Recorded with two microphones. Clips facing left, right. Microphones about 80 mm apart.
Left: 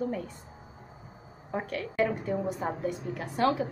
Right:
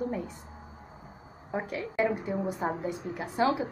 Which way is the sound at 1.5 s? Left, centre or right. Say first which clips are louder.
Right 1 dB; centre.